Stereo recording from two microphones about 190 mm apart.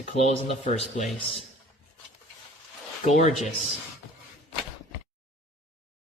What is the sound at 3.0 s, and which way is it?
Speech, 35° left (ahead or behind).